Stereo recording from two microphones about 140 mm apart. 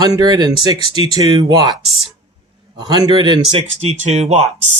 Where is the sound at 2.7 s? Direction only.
30° right (ahead or behind).